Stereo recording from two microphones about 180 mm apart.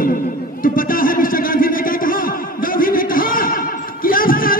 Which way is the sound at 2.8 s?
50° left (ahead or behind).